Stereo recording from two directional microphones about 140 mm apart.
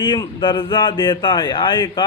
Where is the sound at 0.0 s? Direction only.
35° left (ahead or behind).